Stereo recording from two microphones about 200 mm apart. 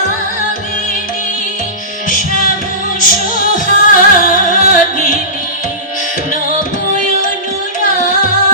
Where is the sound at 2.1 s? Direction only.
40° left (ahead or behind).